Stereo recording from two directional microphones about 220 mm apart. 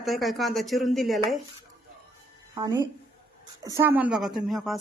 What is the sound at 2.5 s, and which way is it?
Speech, 15° right (ahead or behind).